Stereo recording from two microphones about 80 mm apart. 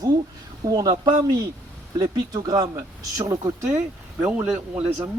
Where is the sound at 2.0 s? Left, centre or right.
Right.